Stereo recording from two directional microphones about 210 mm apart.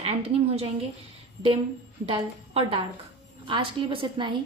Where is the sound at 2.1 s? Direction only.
25° right (ahead or behind).